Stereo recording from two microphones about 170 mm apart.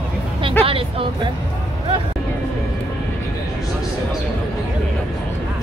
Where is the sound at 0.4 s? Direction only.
30° right (ahead or behind).